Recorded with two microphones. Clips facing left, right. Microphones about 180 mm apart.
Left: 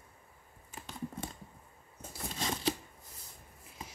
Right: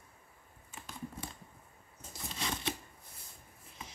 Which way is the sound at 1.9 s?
55° left (ahead or behind).